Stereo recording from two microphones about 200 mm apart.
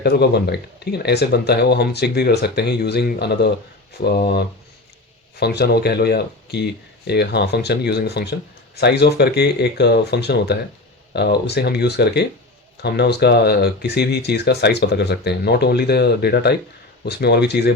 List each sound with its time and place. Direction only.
0.0 s speech: 55° left (ahead or behind)